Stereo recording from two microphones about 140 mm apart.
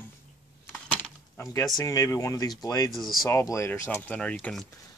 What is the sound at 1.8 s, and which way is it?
Speech, 25° left (ahead or behind).